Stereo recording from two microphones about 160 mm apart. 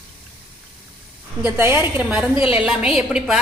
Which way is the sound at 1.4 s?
15° right (ahead or behind).